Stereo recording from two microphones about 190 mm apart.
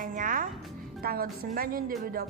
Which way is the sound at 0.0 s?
45° right (ahead or behind).